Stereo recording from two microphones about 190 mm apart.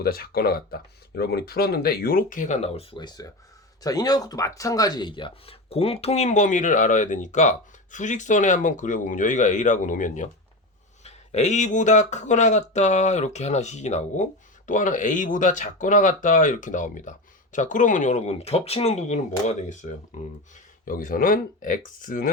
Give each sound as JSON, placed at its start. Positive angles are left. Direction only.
{"t": 0.0, "sound": "speech", "side_deg": 55}
{"t": 20.8, "sound": "speech", "side_deg": 45}